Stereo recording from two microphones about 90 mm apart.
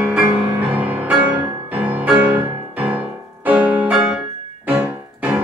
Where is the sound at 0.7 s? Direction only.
15° right (ahead or behind).